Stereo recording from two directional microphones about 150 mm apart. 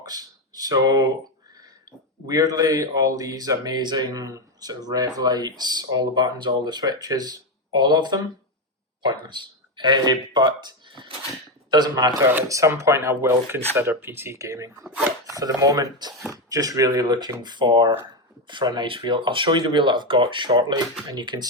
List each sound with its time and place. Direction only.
0.0 s a sound: 25° right (ahead or behind)
2.2 s speech: 25° right (ahead or behind)
9.2 s speech: 30° right (ahead or behind)
14.8 s speech: 10° right (ahead or behind)
15.3 s speech: 25° right (ahead or behind)